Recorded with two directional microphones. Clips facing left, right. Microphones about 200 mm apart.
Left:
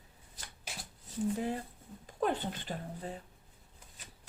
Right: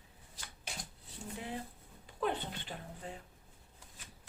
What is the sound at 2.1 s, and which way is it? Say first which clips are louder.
Speech: left 3 dB; 45° left (ahead or behind).